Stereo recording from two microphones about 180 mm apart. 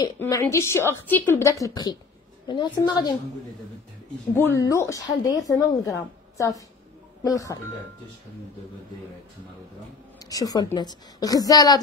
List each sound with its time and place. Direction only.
0.0 s a woman's voice: 15° left (ahead or behind)
4.4 s a woman's voice: 15° left (ahead or behind)
10.1 s a woman's voice: 20° left (ahead or behind)